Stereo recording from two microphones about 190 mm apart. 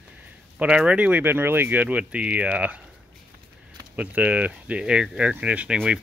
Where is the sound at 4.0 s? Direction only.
10° right (ahead or behind).